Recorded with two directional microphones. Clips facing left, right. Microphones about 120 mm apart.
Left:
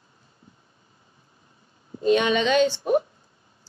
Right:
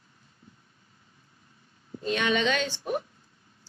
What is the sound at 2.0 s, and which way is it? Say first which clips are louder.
A woman's voice: left 7 dB; 25° left (ahead or behind).